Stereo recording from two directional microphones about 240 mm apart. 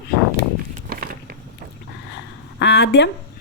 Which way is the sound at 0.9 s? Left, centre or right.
Right.